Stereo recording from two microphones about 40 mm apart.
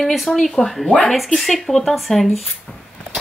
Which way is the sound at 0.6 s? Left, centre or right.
Left.